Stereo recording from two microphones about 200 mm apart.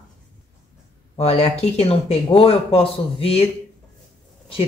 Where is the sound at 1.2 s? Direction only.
30° left (ahead or behind).